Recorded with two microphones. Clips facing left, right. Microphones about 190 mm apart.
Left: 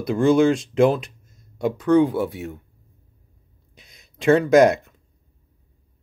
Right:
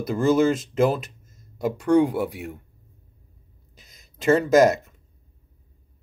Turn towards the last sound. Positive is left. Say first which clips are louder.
# left 2 dB
turn(degrees=-5)  # may be behind; listen again after turning